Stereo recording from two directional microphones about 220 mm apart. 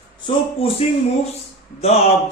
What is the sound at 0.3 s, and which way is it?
Speech, 25° left (ahead or behind).